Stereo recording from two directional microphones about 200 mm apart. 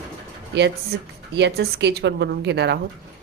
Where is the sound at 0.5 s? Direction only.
60° right (ahead or behind).